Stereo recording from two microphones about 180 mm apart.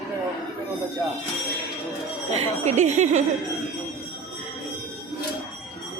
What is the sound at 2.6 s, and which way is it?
Speech, 40° right (ahead or behind).